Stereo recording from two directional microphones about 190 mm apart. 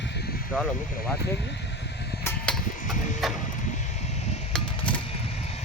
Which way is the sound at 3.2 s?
Centre (ahead or behind).